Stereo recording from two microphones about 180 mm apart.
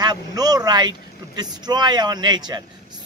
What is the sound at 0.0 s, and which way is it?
Speech, 20° right (ahead or behind).